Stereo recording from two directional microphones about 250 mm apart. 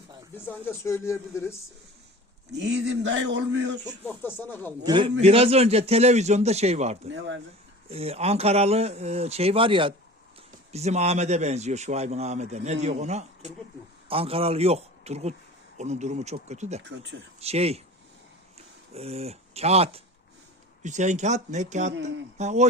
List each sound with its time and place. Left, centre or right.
0.3 s speech: centre
2.5 s speech: right
3.8 s speech: centre
4.9 s a man's voice: centre
7.1 s speech: right
7.9 s a man's voice: right
16.9 s speech: right
17.4 s a man's voice: right
18.9 s a man's voice: right